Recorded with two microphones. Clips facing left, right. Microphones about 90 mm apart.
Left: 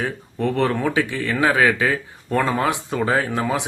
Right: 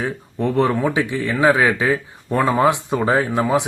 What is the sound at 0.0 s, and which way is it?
Speech, 15° right (ahead or behind).